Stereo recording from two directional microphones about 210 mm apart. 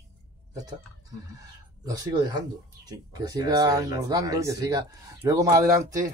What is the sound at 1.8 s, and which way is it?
Speech, 15° right (ahead or behind).